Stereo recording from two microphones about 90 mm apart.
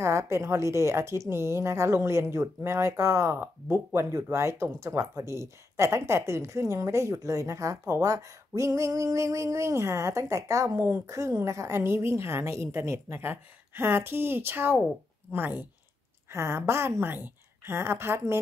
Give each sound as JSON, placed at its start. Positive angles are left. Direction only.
{"t": 0.0, "sound": "a woman's voice", "side_deg": -30}